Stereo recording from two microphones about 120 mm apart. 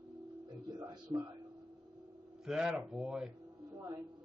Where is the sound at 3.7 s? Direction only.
30° right (ahead or behind).